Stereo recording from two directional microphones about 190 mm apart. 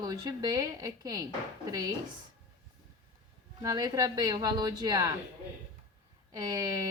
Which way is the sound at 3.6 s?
20° right (ahead or behind).